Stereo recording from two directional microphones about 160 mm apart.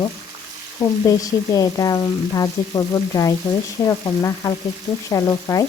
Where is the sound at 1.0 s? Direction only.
20° left (ahead or behind).